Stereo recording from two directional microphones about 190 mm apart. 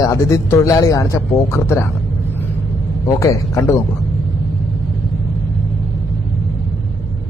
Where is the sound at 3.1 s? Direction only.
15° left (ahead or behind).